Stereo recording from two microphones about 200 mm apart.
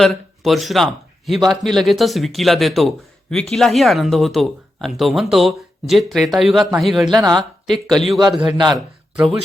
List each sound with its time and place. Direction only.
0.0 s speech: centre (ahead or behind)
7.1 s speech: 20° right (ahead or behind)
7.7 s speech: centre (ahead or behind)
8.5 s speech: 20° right (ahead or behind)
9.1 s speech: centre (ahead or behind)